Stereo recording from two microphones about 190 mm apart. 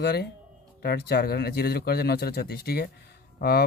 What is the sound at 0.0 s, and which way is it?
Speech, 55° left (ahead or behind).